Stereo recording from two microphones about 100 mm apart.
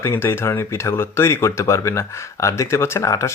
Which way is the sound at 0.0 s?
25° left (ahead or behind).